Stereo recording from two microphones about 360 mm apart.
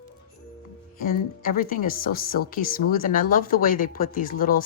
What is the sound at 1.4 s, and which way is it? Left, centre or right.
Speech, left.